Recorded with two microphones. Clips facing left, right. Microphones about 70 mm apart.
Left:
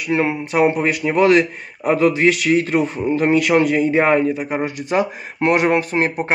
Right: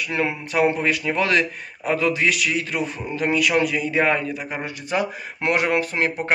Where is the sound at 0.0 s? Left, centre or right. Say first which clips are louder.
Left 5 dB; left.